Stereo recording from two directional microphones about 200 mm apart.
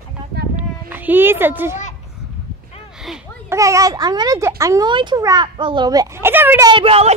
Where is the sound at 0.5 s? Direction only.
10° right (ahead or behind).